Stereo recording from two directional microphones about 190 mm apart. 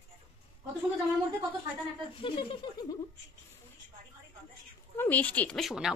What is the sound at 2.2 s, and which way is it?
Speech, 25° left (ahead or behind).